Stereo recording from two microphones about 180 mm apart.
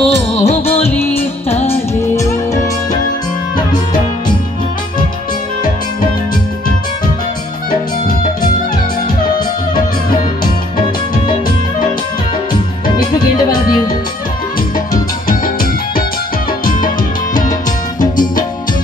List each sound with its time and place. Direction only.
0.0 s music: 35° left (ahead or behind)
2.0 s music: 15° left (ahead or behind)
18.1 s music: 50° left (ahead or behind)